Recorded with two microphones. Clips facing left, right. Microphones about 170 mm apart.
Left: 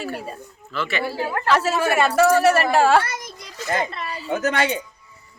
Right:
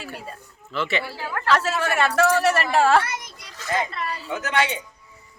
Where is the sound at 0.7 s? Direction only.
20° right (ahead or behind).